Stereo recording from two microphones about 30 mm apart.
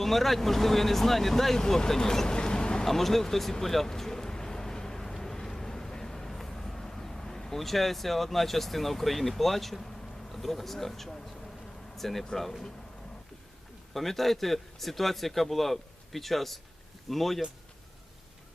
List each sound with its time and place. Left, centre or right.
0.0 s speech: centre
1.5 s speech: left
2.8 s speech: centre
3.6 s a sound: centre
11.9 s speech: centre
13.9 s speech: centre